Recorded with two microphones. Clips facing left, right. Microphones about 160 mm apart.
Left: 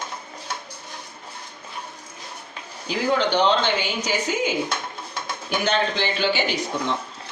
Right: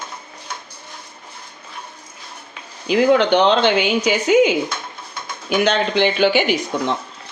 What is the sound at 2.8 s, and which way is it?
Speech, 70° right (ahead or behind).